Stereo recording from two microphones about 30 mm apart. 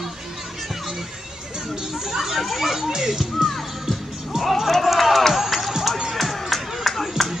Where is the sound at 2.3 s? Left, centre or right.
Centre.